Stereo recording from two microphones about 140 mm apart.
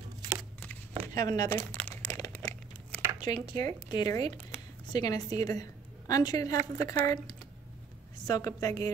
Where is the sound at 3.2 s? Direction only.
30° left (ahead or behind).